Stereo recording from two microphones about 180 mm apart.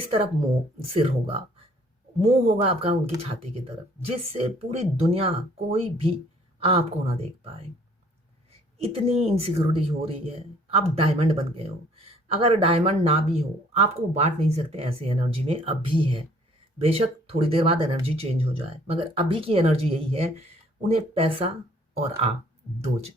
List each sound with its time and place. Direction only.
0.8 s speech: 35° right (ahead or behind)